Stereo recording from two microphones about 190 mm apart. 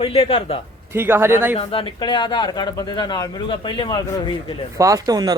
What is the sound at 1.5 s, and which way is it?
Speech, 30° left (ahead or behind).